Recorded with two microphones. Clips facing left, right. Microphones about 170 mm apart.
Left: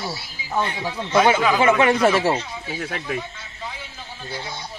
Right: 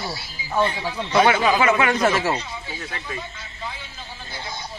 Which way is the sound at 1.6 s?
30° left (ahead or behind).